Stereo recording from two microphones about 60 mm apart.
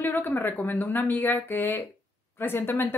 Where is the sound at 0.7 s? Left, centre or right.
Left.